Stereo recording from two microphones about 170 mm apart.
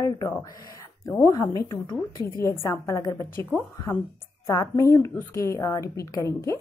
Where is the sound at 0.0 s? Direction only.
15° left (ahead or behind).